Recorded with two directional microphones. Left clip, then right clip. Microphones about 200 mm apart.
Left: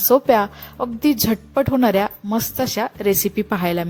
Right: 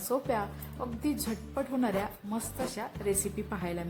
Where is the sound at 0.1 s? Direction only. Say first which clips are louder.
Left 16 dB; 40° left (ahead or behind).